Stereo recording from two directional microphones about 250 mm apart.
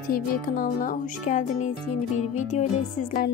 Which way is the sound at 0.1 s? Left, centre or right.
Left.